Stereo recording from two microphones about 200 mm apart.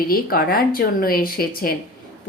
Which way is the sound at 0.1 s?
50° left (ahead or behind).